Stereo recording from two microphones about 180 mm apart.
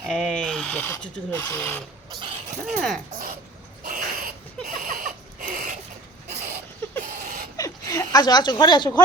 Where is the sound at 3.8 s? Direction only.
55° right (ahead or behind).